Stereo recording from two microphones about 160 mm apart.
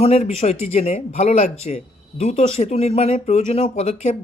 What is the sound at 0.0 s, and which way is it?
Speech, 40° left (ahead or behind).